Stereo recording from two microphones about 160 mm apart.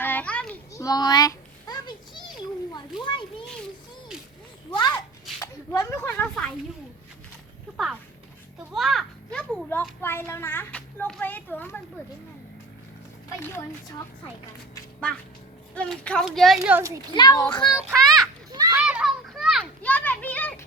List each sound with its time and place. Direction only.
0.0 s children playing: 10° left (ahead or behind)
0.7 s a sound: 20° left (ahead or behind)
3.0 s children playing: 30° left (ahead or behind)
4.7 s a sound: 25° left (ahead or behind)
6.1 s a sound: 5° left (ahead or behind)
8.7 s children playing: centre (ahead or behind)
10.0 s speech: 15° left (ahead or behind)
15.7 s speech: 5° left (ahead or behind)
17.2 s a child's voice: 25° left (ahead or behind)
17.7 s speech: centre (ahead or behind)
18.5 s children playing: 25° right (ahead or behind)
18.8 s children playing: 5° right (ahead or behind)
19.8 s children playing: 10° left (ahead or behind)